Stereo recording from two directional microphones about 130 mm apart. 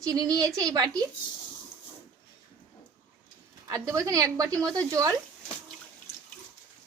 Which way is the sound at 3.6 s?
25° right (ahead or behind).